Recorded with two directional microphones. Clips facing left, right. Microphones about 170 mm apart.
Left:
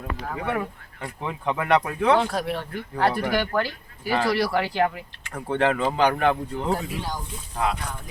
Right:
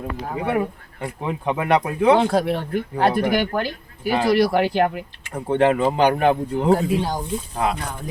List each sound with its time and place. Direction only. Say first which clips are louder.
0.3 s speech: right 5 dB; 25° right (ahead or behind)
2.1 s speech: right 5 dB; 30° right (ahead or behind)
5.3 s speech: right 5 dB; 30° right (ahead or behind)